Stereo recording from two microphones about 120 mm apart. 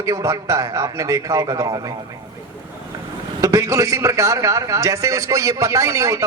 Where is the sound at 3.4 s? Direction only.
25° right (ahead or behind).